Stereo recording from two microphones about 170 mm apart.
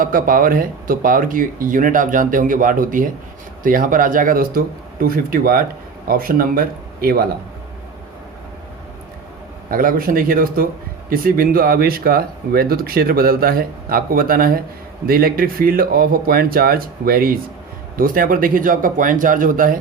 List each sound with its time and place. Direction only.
0.0 s speech: 55° right (ahead or behind)
9.6 s speech: 55° right (ahead or behind)